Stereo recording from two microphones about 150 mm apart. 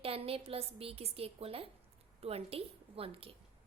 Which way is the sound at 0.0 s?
40° right (ahead or behind).